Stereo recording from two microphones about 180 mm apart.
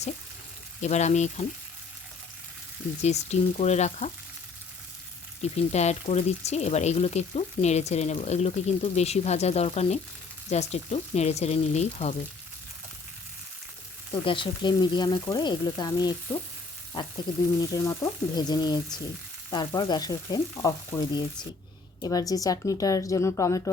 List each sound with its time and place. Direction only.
0.8 s speech: 40° left (ahead or behind)
3.0 s speech: 40° left (ahead or behind)
5.4 s speech: 40° left (ahead or behind)
14.1 s frying: 30° left (ahead or behind)
17.6 s frying: 20° left (ahead or behind)